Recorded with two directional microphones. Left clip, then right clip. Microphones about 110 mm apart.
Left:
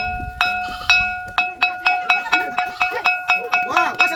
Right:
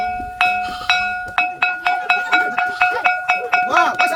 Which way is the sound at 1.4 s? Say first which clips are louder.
Right 1 dB; 45° left (ahead or behind).